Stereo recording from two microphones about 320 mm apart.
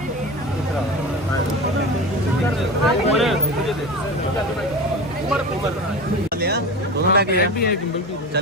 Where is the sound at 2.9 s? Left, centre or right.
Centre.